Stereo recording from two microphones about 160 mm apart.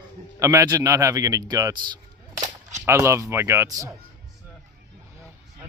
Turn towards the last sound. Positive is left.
turn(degrees=-20)  # may be behind; listen again after turning